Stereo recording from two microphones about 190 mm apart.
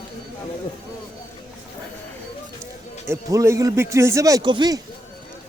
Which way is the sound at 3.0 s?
15° right (ahead or behind).